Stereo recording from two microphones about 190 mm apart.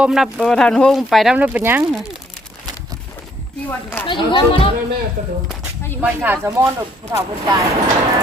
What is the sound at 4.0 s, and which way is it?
Speech, 25° left (ahead or behind).